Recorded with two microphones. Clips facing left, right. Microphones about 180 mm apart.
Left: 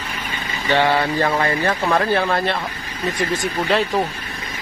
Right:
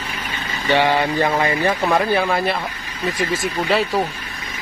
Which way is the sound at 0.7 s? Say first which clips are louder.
Right 1 dB; 15° right (ahead or behind).